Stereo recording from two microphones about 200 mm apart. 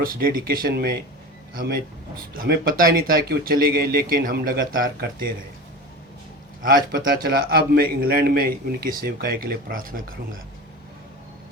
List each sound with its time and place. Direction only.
0.0 s a man's voice: 45° right (ahead or behind)
6.6 s a man's voice: 45° right (ahead or behind)